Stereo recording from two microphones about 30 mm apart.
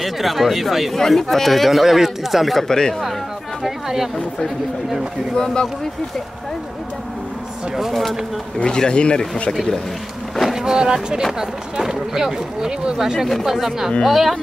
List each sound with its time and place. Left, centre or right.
0.0 s speech: centre
0.9 s speech: centre
2.7 s speech: left
3.6 s a sound: centre
5.3 s speech: left
7.9 s speech: centre
8.6 s speech: left
10.5 s speech: right; by 14.3 s centre